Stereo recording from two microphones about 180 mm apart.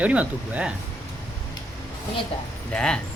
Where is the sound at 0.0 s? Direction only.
5° right (ahead or behind).